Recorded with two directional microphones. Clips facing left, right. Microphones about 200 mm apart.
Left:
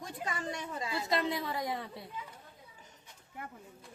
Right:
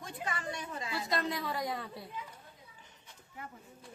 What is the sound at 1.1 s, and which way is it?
Speech, 25° left (ahead or behind).